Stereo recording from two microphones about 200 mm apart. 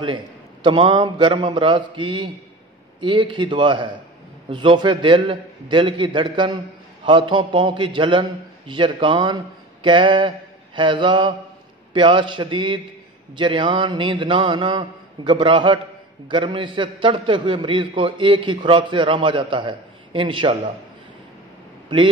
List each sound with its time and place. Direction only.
0.7 s a man's voice: 25° right (ahead or behind)
21.8 s speech: 25° right (ahead or behind)